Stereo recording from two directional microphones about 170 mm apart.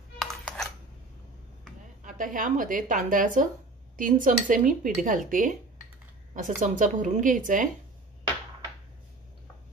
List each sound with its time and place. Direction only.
0.2 s music: 5° left (ahead or behind)
2.0 s a woman's voice: 50° right (ahead or behind)
6.3 s a woman's voice: 50° right (ahead or behind)